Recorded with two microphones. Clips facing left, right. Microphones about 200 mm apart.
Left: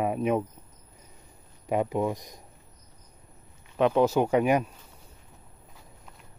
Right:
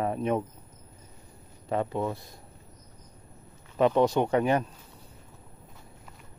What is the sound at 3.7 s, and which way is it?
Speech, centre (ahead or behind).